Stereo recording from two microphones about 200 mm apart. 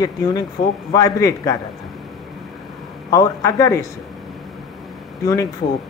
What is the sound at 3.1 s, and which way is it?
Speech, 15° left (ahead or behind).